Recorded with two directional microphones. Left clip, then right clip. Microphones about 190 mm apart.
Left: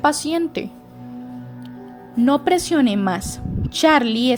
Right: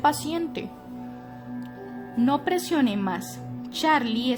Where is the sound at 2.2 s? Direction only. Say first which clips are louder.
Left 7 dB; 25° left (ahead or behind).